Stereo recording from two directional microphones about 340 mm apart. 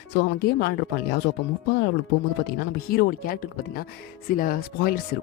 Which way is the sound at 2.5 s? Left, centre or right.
Left.